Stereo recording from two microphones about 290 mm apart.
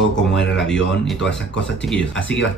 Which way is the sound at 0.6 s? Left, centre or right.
Centre.